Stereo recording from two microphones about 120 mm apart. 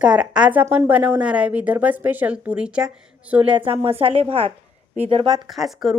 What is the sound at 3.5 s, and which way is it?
Speech, 45° right (ahead or behind).